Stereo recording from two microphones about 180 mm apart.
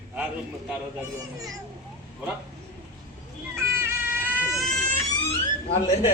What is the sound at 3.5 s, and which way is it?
Goat, 15° right (ahead or behind).